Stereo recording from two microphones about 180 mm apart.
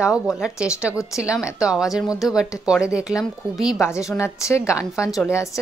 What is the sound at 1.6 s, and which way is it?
A woman's voice, 5° right (ahead or behind).